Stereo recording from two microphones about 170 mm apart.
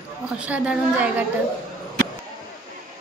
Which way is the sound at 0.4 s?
5° right (ahead or behind).